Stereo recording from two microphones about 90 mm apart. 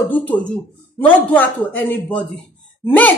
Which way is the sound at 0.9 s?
20° left (ahead or behind).